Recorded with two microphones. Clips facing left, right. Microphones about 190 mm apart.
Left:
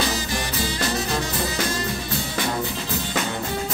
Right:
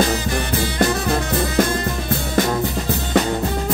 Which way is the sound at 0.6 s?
55° right (ahead or behind).